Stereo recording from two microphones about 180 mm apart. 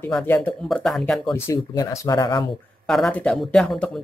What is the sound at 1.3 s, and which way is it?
Speech, 15° left (ahead or behind).